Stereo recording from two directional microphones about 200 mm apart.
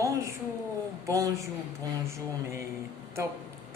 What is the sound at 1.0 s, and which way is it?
Speech, 15° right (ahead or behind).